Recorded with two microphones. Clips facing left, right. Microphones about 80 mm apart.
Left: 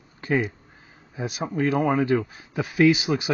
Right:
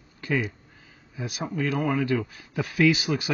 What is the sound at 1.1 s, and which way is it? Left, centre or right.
Speech, left.